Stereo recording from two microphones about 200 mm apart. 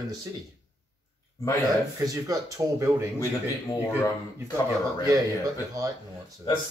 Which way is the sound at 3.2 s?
15° left (ahead or behind).